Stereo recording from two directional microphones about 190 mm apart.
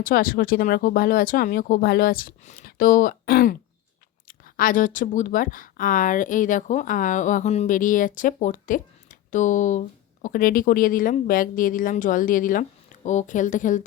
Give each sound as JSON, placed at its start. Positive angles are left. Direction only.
{"t": 0.0, "sound": "speech", "side_deg": 50}